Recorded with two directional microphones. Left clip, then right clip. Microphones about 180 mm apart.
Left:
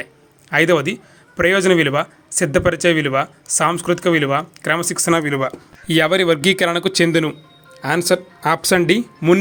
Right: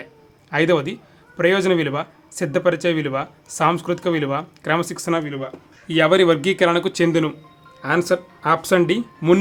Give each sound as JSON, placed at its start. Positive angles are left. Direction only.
{"t": 0.5, "sound": "speech", "side_deg": 15}
{"t": 5.1, "sound": "speech", "side_deg": 45}
{"t": 5.9, "sound": "speech", "side_deg": 20}